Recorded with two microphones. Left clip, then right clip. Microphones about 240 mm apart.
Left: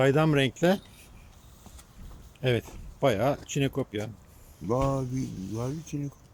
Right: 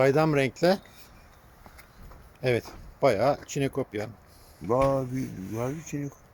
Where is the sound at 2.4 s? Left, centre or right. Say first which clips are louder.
Right 2 dB; centre.